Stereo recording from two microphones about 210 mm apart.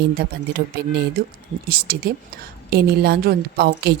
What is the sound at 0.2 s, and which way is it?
A woman's voice, 50° right (ahead or behind).